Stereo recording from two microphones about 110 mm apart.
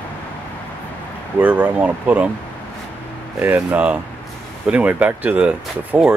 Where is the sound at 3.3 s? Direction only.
20° right (ahead or behind).